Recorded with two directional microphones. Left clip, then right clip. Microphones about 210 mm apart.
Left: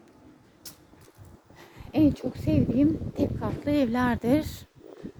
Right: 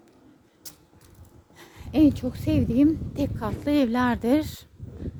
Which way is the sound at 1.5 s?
25° right (ahead or behind).